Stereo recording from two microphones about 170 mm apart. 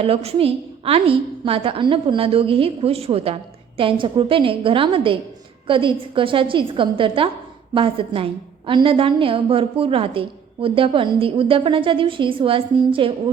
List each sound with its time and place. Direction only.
0.0 s a woman's voice: 35° right (ahead or behind)